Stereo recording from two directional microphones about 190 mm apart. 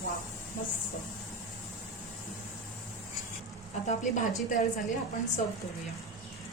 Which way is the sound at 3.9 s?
40° left (ahead or behind).